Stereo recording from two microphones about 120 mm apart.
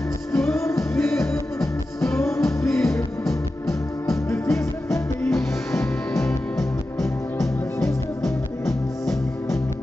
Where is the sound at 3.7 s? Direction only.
25° left (ahead or behind).